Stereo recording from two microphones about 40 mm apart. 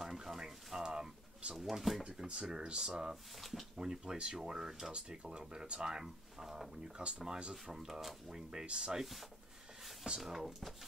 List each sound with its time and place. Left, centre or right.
0.0 s a sound: centre
0.8 s pigeon: right; by 2.0 s centre
2.3 s speech: centre
3.3 s speech: centre
3.7 s speech: centre
4.9 s speech: right; by 6.7 s centre
7.0 s speech: right
7.6 s speech: centre
8.3 s speech: centre
10.2 s speech: centre